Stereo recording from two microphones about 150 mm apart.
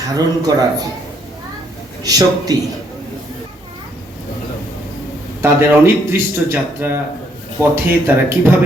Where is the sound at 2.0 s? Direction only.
25° right (ahead or behind).